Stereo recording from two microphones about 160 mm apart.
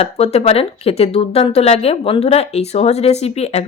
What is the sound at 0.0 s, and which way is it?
Speech, 40° left (ahead or behind).